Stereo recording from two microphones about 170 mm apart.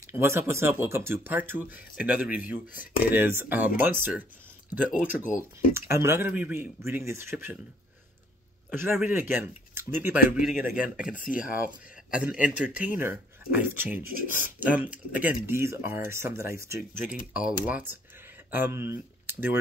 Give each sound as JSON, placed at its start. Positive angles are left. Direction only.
{"t": 0.0, "sound": "speech", "side_deg": -15}
{"t": 5.2, "sound": "speech", "side_deg": 50}
{"t": 5.7, "sound": "speech", "side_deg": -15}
{"t": 8.6, "sound": "a sound", "side_deg": -15}
{"t": 8.9, "sound": "speech", "side_deg": -10}
{"t": 11.1, "sound": "speech", "side_deg": 55}
{"t": 11.6, "sound": "speech", "side_deg": -5}